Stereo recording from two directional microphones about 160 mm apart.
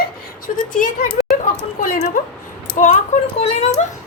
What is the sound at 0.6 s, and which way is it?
Speech, 55° left (ahead or behind).